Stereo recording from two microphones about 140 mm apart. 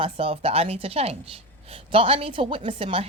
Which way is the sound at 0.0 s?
45° right (ahead or behind).